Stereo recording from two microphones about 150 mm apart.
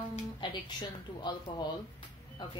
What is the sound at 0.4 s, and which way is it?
Speech, 30° left (ahead or behind).